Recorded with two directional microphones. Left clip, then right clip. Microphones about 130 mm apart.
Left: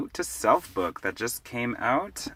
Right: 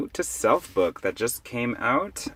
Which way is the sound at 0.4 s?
25° right (ahead or behind).